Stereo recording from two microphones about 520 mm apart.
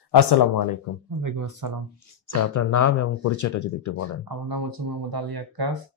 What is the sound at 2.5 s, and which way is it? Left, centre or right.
Speech, left.